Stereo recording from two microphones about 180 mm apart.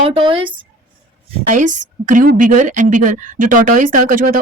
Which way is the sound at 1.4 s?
45° right (ahead or behind).